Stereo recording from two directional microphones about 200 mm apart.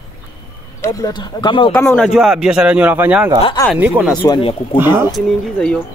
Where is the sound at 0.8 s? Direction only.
20° left (ahead or behind).